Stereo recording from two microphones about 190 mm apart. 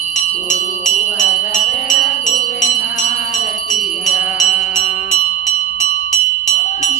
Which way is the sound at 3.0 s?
40° left (ahead or behind).